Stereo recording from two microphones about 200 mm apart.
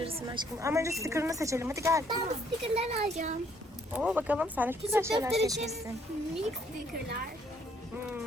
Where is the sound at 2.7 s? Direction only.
30° right (ahead or behind).